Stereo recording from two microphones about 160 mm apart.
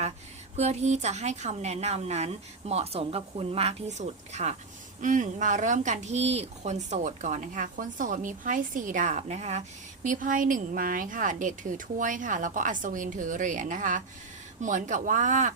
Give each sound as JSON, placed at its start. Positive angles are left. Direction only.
{"t": 0.5, "sound": "speech", "side_deg": -45}